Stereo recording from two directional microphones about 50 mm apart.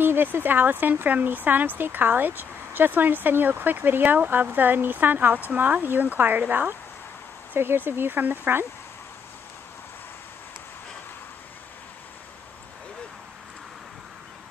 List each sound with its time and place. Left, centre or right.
0.0 s speech: right
7.5 s speech: right